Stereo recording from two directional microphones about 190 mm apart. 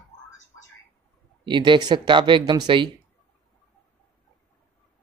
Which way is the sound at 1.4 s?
25° right (ahead or behind).